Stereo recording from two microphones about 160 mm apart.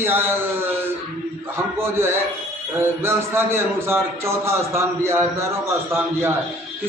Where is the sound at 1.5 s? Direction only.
15° right (ahead or behind).